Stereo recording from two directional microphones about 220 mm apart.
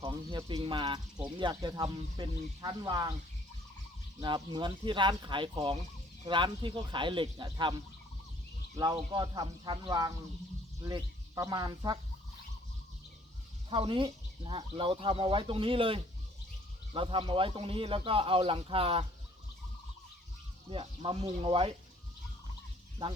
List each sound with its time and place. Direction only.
0.0 s speech: 20° right (ahead or behind)
4.2 s speech: 20° right (ahead or behind)
13.7 s speech: 25° right (ahead or behind)
20.7 s speech: 25° right (ahead or behind)